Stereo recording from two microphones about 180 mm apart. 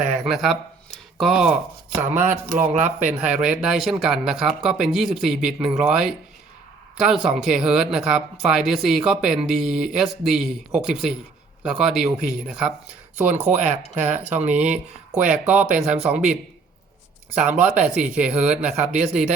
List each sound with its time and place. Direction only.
0.3 s speech: centre (ahead or behind)
2.5 s speech: 45° right (ahead or behind)
3.2 s speech: 5° right (ahead or behind)
13.4 s speech: 40° right (ahead or behind)
14.4 s speech: 10° right (ahead or behind)